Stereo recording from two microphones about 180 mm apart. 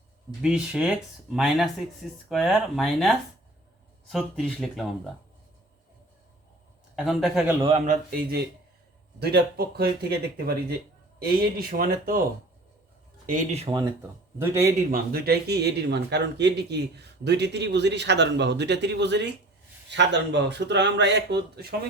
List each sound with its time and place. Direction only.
0.4 s speech: 5° right (ahead or behind)
6.9 s speech: 5° right (ahead or behind)
7.9 s speech: 55° right (ahead or behind)
13.2 s speech: 40° right (ahead or behind)
14.3 s speech: 15° right (ahead or behind)
14.9 s speech: 55° right (ahead or behind)